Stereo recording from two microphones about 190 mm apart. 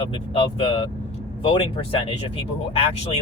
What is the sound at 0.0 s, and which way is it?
Speech, 30° left (ahead or behind).